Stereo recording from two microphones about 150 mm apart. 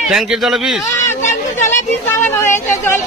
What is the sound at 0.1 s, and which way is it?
Speech, 5° right (ahead or behind).